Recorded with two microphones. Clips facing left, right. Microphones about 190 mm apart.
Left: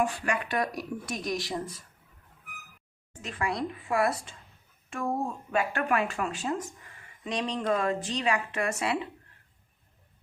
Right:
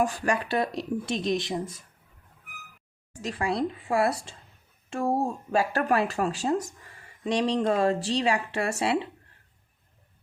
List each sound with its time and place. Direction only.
0.0 s speech: 40° right (ahead or behind); by 1.7 s 20° right (ahead or behind)
3.2 s speech: 35° right (ahead or behind)